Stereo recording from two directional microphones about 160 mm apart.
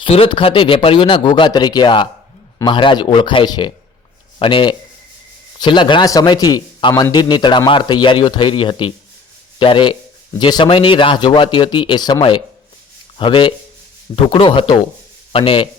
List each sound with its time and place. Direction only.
0.0 s a man's voice: 35° left (ahead or behind)